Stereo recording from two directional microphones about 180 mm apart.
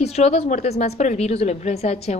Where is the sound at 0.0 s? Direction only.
35° left (ahead or behind).